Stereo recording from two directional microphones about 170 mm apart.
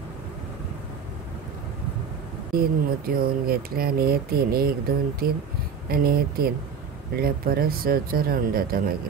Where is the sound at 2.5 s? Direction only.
60° right (ahead or behind).